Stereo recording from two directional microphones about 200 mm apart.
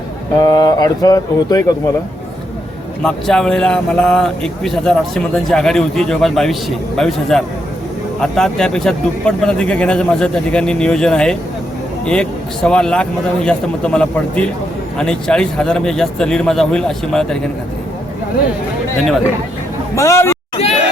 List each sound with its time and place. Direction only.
0.3 s speech: 20° left (ahead or behind)
3.0 s speech: 5° left (ahead or behind)
20.0 s speech: 15° left (ahead or behind)
20.6 s a sound: 30° left (ahead or behind)